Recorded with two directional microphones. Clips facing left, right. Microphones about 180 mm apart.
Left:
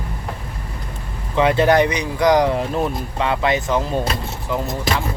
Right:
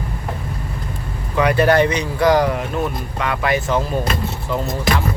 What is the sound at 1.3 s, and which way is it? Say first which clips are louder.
Speech: even; 25° left (ahead or behind).